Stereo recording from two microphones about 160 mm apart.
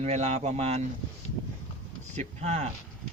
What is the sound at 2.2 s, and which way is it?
Speech, 45° right (ahead or behind).